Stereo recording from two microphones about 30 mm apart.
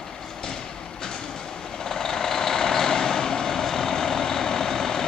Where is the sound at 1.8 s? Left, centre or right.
Centre.